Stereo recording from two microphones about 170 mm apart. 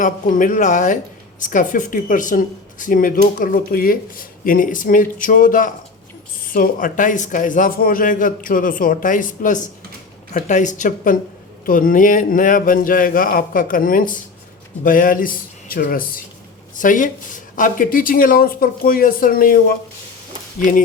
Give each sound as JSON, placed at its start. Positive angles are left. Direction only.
{"t": 0.0, "sound": "speech", "side_deg": 50}